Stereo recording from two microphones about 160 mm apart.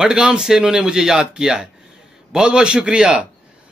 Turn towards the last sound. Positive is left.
turn(degrees=-5)  # may be behind; listen again after turning